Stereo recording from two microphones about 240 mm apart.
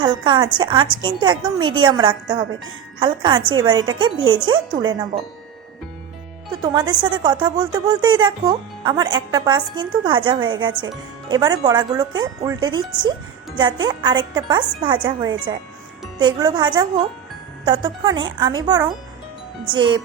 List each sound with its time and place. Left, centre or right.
0.0 s a woman's voice: centre
6.5 s a woman's voice: centre